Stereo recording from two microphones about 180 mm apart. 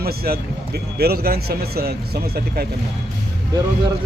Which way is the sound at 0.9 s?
60° right (ahead or behind).